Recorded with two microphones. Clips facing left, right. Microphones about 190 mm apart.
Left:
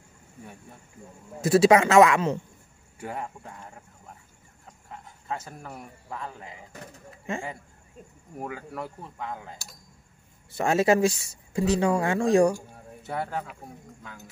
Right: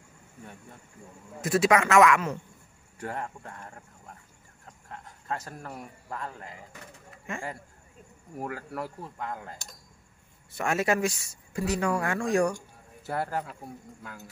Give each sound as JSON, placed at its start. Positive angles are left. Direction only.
{"t": 1.4, "sound": "speech", "side_deg": 30}
{"t": 3.0, "sound": "speech", "side_deg": 5}
{"t": 4.8, "sound": "a man's voice", "side_deg": 5}
{"t": 8.4, "sound": "speech", "side_deg": 0}
{"t": 10.5, "sound": "speech", "side_deg": 30}
{"t": 13.0, "sound": "speech", "side_deg": -5}